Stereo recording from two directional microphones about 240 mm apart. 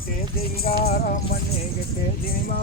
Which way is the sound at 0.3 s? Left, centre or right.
Left.